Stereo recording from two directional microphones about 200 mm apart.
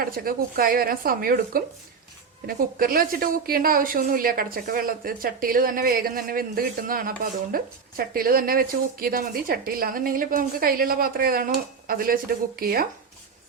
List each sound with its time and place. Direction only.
0.0 s a woman's voice: 45° right (ahead or behind)
2.7 s a woman's voice: 45° right (ahead or behind)